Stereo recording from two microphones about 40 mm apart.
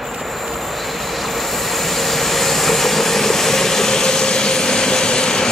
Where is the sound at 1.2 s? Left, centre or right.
Centre.